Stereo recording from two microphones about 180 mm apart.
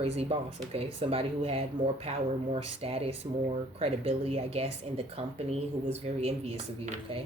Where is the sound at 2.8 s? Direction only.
35° right (ahead or behind).